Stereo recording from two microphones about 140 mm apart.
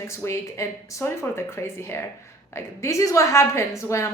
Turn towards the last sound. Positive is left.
turn(degrees=20)  # may be behind; listen again after turning